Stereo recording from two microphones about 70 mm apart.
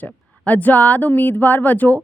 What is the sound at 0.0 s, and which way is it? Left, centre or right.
A woman's voice, left.